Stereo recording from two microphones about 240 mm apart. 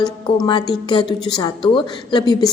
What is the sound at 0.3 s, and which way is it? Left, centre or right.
A woman's voice, centre.